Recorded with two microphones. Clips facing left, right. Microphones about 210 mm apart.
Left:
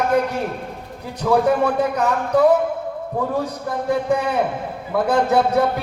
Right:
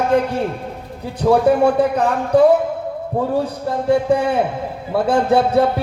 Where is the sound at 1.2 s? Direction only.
30° right (ahead or behind).